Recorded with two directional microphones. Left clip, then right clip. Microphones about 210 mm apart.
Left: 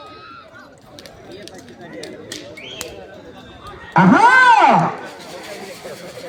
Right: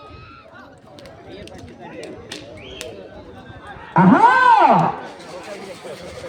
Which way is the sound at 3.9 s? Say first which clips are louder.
Left 2 dB; 40° left (ahead or behind).